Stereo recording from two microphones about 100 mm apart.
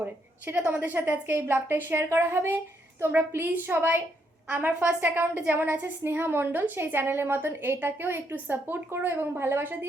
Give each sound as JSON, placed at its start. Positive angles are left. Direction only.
{"t": 0.4, "sound": "a woman's voice", "side_deg": -15}